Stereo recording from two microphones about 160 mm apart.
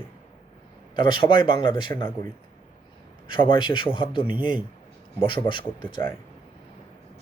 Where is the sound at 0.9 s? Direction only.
30° left (ahead or behind).